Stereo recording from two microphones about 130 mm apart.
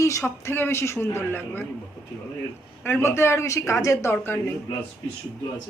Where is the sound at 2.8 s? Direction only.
15° left (ahead or behind).